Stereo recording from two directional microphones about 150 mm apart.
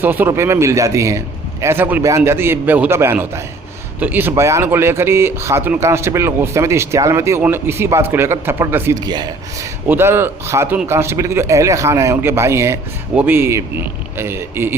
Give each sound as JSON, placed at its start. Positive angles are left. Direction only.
{"t": 0.0, "sound": "speech", "side_deg": -15}